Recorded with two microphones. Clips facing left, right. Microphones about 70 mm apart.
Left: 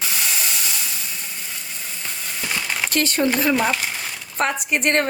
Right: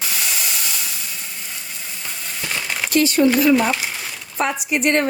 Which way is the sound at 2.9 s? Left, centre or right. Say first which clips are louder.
Right 6 dB; left.